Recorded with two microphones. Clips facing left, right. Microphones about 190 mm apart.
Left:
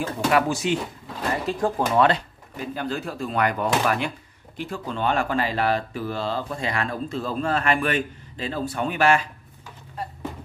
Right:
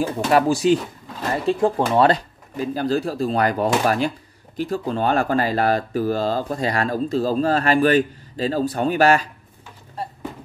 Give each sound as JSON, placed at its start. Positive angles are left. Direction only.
{"t": 0.3, "sound": "speech", "side_deg": -35}